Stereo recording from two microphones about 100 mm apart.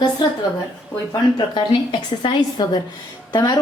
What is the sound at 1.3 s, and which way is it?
A woman's voice, 50° left (ahead or behind).